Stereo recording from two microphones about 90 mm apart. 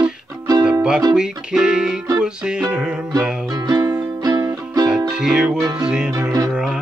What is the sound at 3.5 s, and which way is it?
Music, 45° right (ahead or behind).